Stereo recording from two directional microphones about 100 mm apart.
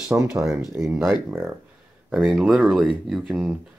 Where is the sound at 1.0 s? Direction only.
20° right (ahead or behind).